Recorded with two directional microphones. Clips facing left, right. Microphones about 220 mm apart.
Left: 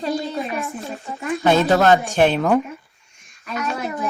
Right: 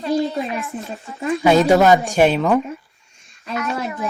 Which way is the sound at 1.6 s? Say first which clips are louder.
Right 2 dB; 10° right (ahead or behind).